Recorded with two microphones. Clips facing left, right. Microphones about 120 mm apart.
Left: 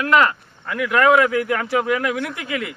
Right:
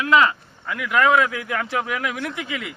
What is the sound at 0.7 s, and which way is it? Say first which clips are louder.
A man's voice: left 3 dB; centre (ahead or behind).